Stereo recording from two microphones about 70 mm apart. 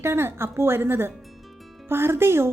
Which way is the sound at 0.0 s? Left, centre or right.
Right.